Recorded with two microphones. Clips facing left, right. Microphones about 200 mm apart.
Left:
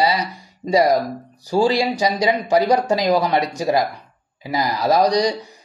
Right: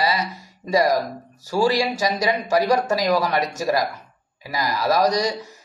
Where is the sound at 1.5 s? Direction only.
20° left (ahead or behind).